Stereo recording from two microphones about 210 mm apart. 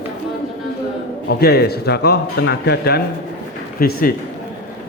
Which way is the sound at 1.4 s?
50° left (ahead or behind).